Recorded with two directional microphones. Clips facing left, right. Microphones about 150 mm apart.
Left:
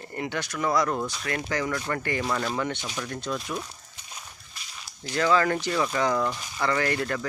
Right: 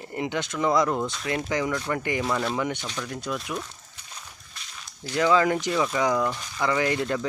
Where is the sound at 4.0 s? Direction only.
10° left (ahead or behind).